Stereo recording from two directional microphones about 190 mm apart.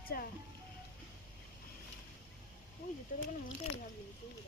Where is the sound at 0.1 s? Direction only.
55° left (ahead or behind).